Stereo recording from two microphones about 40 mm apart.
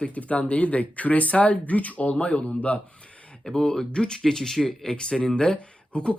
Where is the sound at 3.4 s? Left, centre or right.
Centre.